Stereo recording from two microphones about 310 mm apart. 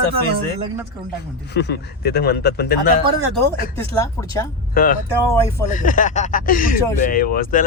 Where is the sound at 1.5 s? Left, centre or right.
Left.